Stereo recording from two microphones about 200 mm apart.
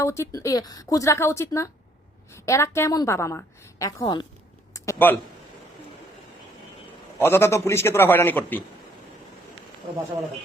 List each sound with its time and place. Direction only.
0.0 s a woman's voice: 15° left (ahead or behind)
4.7 s a sound: 10° left (ahead or behind)
7.2 s a woman's voice: 10° left (ahead or behind)